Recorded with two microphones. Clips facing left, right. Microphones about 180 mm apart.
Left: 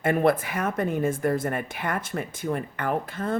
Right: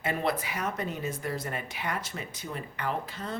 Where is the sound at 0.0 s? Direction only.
50° left (ahead or behind).